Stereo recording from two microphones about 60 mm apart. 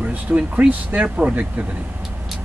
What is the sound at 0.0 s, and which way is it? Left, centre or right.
Speech, right.